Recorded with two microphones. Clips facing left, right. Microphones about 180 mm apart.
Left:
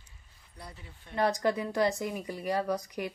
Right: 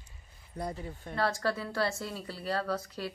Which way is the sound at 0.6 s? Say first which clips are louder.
Right 11 dB; 45° right (ahead or behind).